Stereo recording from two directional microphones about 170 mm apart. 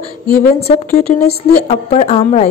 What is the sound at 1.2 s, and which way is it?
Speech, 65° left (ahead or behind).